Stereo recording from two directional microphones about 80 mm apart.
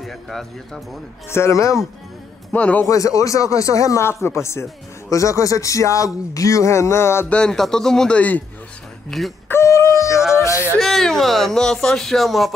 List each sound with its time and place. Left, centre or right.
0.0 s speech: centre
1.3 s speech: left
2.5 s a man's voice: centre
2.9 s speech: left
7.2 s speech: centre
8.2 s a man's voice: left
9.1 s speech: centre
9.5 s a sound: left
10.1 s a sound: centre
10.4 s a sound: left
10.8 s speech: centre